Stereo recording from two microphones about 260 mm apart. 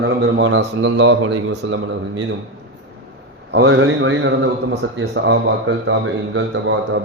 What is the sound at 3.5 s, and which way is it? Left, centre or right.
A man's voice, right.